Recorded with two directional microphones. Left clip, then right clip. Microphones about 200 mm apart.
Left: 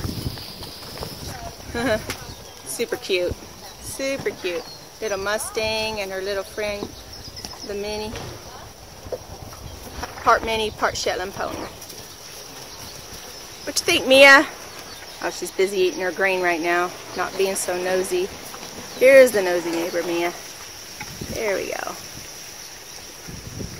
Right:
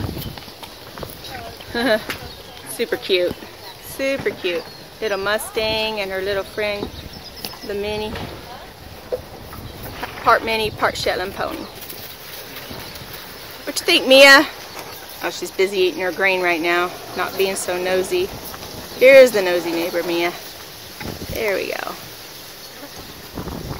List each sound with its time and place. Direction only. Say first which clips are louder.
1.7 s speech: right 4 dB; 5° right (ahead or behind)
10.2 s speech: right 2 dB; 5° left (ahead or behind)
13.7 s speech: right 4 dB; centre (ahead or behind)
15.2 s speech: right 2 dB; 20° left (ahead or behind)
21.4 s speech: right 3 dB; 10° left (ahead or behind)